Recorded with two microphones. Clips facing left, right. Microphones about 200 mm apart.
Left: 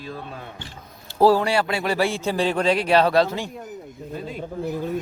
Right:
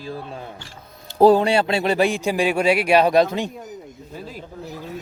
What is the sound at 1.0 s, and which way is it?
A man's voice, 20° right (ahead or behind).